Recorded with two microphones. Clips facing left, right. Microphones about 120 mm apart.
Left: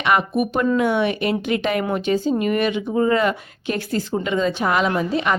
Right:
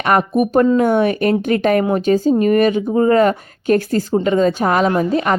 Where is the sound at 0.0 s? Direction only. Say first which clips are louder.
Right 4 dB; 45° right (ahead or behind).